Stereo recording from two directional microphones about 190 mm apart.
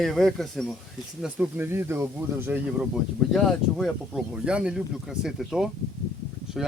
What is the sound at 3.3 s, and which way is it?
Speech, centre (ahead or behind).